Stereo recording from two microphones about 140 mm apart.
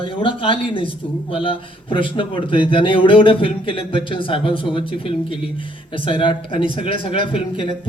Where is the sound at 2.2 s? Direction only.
40° left (ahead or behind).